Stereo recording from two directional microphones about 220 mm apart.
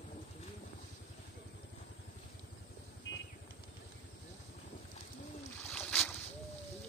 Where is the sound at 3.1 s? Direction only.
60° left (ahead or behind).